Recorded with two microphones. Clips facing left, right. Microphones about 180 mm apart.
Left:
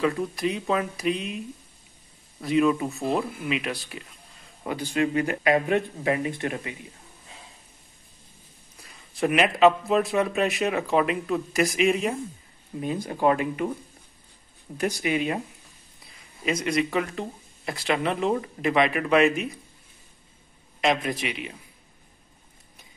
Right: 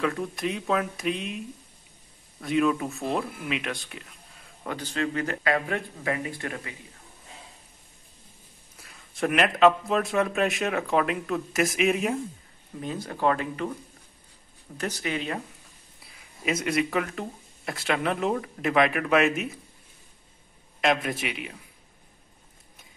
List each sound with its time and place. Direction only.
0.0 s speech: centre (ahead or behind)
2.4 s speech: centre (ahead or behind); by 6.7 s 20° left (ahead or behind)
8.8 s speech: centre (ahead or behind)
12.8 s speech: 15° left (ahead or behind)
14.8 s speech: 10° left (ahead or behind)
16.2 s speech: 5° right (ahead or behind)
20.8 s speech: centre (ahead or behind)